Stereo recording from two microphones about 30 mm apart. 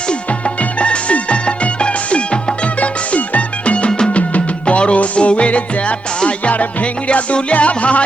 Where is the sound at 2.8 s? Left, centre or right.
Left.